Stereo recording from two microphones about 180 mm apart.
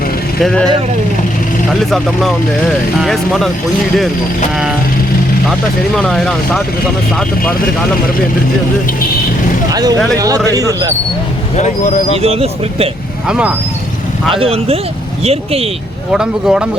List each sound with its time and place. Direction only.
0.4 s speech: 5° left (ahead or behind)
1.8 s speech: centre (ahead or behind)
6.0 s speech: centre (ahead or behind)
9.7 s speech: 20° right (ahead or behind)
11.5 s speech: 40° left (ahead or behind)
12.1 s speech: 35° right (ahead or behind)
13.2 s speech: 5° right (ahead or behind)
14.3 s speech: 30° right (ahead or behind)
16.1 s speech: 5° right (ahead or behind)